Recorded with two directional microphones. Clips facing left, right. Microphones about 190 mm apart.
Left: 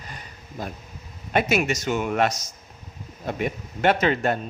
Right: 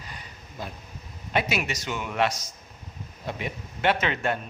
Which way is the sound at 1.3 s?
45° left (ahead or behind).